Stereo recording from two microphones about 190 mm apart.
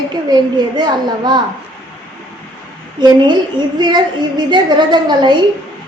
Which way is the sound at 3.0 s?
25° right (ahead or behind).